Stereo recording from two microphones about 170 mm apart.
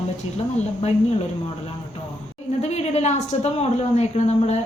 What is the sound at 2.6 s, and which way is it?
A woman's voice, 40° left (ahead or behind).